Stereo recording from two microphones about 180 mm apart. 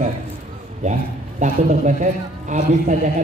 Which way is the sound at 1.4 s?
45° right (ahead or behind).